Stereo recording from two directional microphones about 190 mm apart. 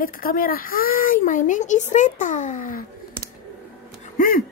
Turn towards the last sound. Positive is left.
turn(degrees=45)  # may be behind; listen again after turning